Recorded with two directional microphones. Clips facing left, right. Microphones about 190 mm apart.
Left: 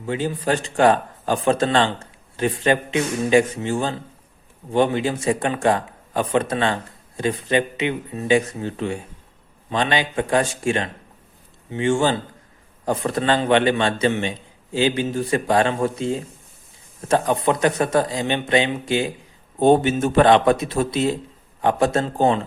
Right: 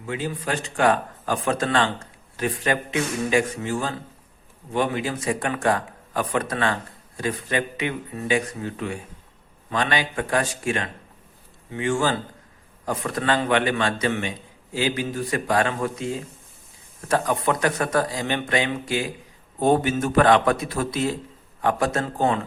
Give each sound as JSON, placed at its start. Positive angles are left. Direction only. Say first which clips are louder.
{"t": 0.0, "sound": "a man's voice", "louder": "left 5 dB", "side_deg": 30}